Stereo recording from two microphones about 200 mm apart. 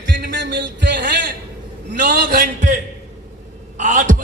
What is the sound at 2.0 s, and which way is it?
A man's voice, 50° right (ahead or behind).